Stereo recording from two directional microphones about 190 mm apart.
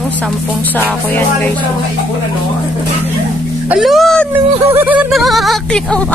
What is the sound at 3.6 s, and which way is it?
Speech, 5° right (ahead or behind).